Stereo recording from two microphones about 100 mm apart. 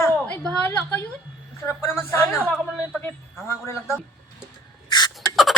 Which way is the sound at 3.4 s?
25° left (ahead or behind).